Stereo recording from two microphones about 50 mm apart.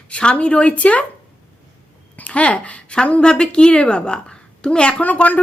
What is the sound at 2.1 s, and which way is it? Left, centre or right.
A woman's voice, left.